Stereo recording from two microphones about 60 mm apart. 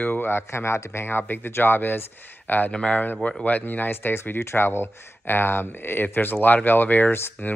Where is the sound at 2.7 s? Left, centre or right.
Centre.